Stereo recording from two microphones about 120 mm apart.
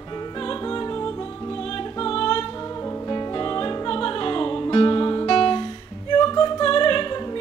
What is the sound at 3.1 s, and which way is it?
Music, 35° left (ahead or behind).